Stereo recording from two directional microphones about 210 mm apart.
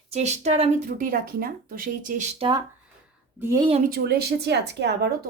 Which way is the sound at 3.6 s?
30° right (ahead or behind).